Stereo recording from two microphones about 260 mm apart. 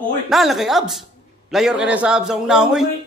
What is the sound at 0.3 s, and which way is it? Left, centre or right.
A man's voice, centre.